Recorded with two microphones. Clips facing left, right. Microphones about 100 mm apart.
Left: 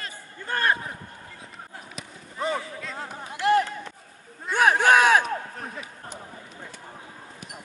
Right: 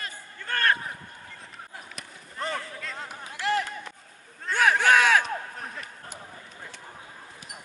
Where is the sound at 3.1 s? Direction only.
20° left (ahead or behind).